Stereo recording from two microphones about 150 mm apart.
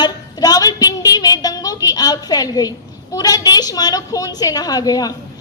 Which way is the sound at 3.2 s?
25° left (ahead or behind).